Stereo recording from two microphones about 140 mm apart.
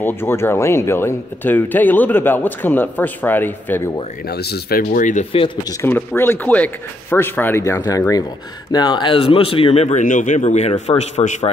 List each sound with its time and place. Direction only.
0.0 s speech: 15° left (ahead or behind)
4.6 s speech: 80° left
5.7 s speech: 15° left (ahead or behind); by 11.5 s 50° left (ahead or behind)